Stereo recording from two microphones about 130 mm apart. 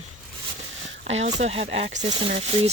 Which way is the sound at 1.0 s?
55° right (ahead or behind).